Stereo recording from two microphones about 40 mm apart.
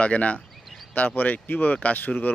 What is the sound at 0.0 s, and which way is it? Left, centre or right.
Speech, left.